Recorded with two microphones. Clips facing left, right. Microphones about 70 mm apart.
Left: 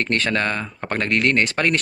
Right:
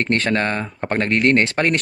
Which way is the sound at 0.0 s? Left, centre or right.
Right.